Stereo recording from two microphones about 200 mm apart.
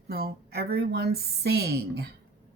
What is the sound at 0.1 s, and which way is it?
Speech, 50° right (ahead or behind).